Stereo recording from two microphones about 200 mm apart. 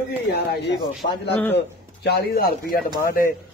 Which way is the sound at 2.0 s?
55° left (ahead or behind).